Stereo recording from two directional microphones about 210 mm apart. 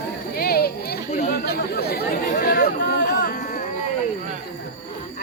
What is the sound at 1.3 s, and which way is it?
Chatter, 50° left (ahead or behind).